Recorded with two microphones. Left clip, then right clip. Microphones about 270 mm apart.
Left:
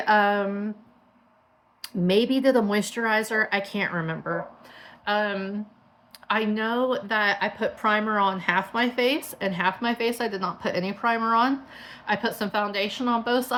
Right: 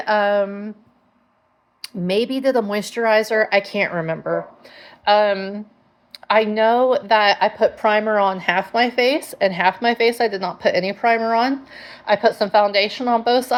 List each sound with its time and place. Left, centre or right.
0.0 s speech: left
1.8 s speech: left
6.1 s a sound: left
6.6 s speech: left
7.6 s a woman's voice: centre
8.4 s speech: left